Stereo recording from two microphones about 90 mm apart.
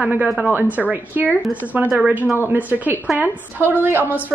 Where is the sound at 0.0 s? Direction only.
15° right (ahead or behind).